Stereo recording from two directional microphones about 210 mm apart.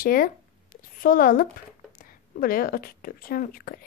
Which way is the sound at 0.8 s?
40° left (ahead or behind).